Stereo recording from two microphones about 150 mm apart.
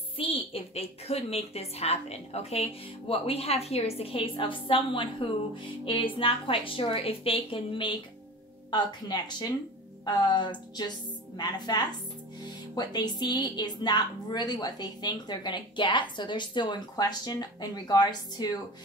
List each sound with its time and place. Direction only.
0.2 s a woman's voice: 40° left (ahead or behind)